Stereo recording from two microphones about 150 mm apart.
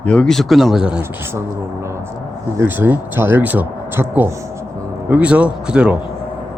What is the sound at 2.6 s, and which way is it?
Speech, 15° right (ahead or behind).